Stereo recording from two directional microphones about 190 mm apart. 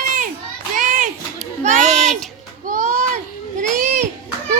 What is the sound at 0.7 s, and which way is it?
Children playing, 45° right (ahead or behind).